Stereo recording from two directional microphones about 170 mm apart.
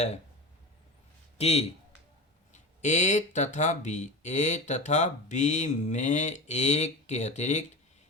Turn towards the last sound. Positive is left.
turn(degrees=40)  # may be behind; listen again after turning